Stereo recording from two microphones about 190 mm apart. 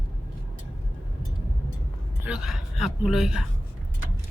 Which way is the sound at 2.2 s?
5° right (ahead or behind).